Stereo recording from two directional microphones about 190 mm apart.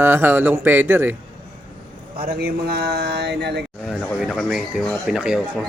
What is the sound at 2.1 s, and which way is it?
A man's voice, 55° right (ahead or behind).